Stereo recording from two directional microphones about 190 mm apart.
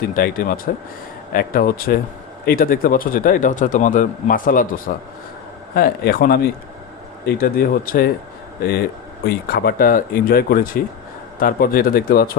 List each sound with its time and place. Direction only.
0.2 s speech: 45° left (ahead or behind)